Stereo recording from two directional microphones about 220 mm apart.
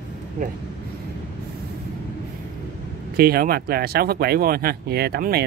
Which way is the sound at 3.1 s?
45° right (ahead or behind).